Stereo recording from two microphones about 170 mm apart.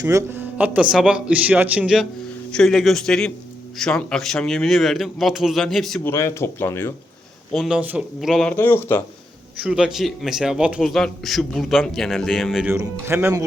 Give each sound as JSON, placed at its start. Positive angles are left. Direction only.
{"t": 0.0, "sound": "a man's voice", "side_deg": -15}
{"t": 6.0, "sound": "speech", "side_deg": 15}
{"t": 7.5, "sound": "a man's voice", "side_deg": -5}
{"t": 8.5, "sound": "speech", "side_deg": 15}
{"t": 9.6, "sound": "a man's voice", "side_deg": -5}
{"t": 12.6, "sound": "speech", "side_deg": -15}